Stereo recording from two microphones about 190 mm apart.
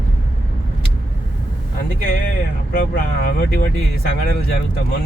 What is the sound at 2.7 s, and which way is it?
Speech, 55° left (ahead or behind).